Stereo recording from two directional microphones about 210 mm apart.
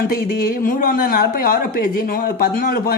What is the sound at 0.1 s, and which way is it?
Speech, 45° left (ahead or behind).